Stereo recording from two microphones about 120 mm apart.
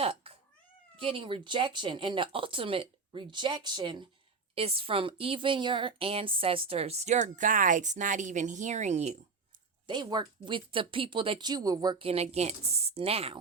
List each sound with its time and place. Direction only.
0.0 s cat: 55° right (ahead or behind)
0.9 s speech: 50° right (ahead or behind)
4.5 s a woman's voice: 50° right (ahead or behind); by 9.1 s 70° right (ahead or behind)
9.8 s speech: 40° right (ahead or behind)
11.9 s a woman's voice: 55° right (ahead or behind)